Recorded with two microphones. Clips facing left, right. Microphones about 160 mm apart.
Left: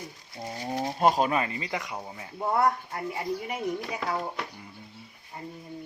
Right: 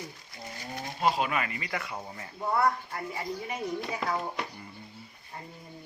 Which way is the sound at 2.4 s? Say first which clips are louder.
Left 2 dB; 20° left (ahead or behind).